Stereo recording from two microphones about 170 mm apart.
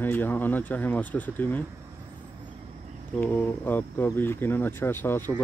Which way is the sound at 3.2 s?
10° left (ahead or behind).